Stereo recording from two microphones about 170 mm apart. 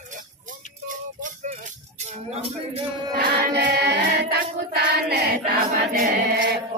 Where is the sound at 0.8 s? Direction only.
50° right (ahead or behind).